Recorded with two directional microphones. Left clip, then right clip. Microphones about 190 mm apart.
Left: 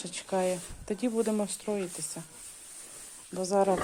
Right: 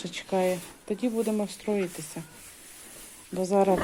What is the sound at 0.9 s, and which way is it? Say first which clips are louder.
Speech: right 1 dB; 20° left (ahead or behind).